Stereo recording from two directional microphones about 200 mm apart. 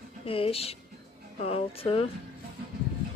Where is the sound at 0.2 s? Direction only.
30° left (ahead or behind).